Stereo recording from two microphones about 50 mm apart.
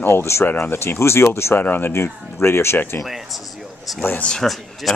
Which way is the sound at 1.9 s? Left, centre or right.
Left.